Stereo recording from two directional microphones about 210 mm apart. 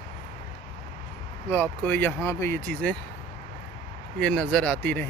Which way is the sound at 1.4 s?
10° left (ahead or behind).